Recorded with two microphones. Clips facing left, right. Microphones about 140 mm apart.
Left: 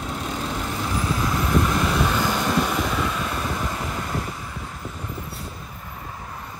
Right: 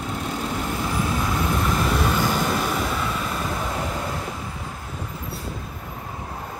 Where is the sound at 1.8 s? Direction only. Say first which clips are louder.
Even; centre (ahead or behind).